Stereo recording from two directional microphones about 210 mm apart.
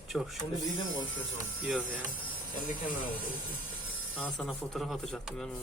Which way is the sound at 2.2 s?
40° left (ahead or behind).